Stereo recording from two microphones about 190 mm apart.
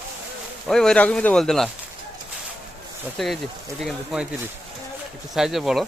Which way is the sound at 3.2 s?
5° left (ahead or behind).